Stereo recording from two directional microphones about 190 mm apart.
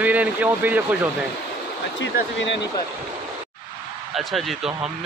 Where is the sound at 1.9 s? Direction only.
70° left (ahead or behind).